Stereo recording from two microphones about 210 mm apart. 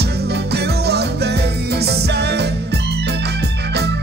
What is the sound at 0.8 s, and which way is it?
Music, 50° right (ahead or behind).